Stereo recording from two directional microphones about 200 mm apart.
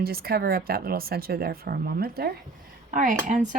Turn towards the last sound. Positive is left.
turn(degrees=-40)  # may be behind; listen again after turning